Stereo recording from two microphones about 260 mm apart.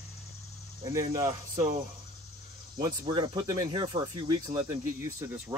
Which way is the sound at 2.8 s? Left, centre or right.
Centre.